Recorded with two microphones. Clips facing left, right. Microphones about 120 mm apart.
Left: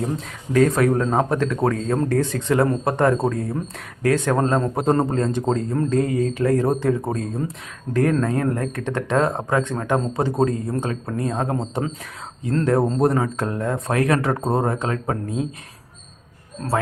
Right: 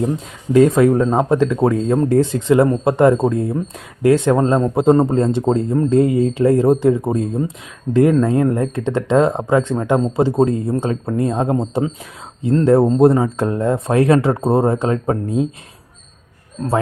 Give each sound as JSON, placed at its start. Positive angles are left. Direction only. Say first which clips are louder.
{"t": 0.5, "sound": "speech", "louder": "right 5 dB", "side_deg": -20}
{"t": 7.9, "sound": "speech", "louder": "right 6 dB", "side_deg": -15}